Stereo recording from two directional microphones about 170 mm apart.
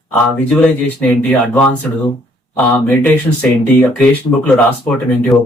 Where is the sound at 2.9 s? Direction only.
5° left (ahead or behind).